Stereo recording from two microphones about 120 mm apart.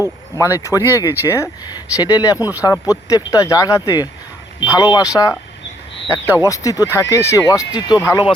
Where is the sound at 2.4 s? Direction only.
15° right (ahead or behind).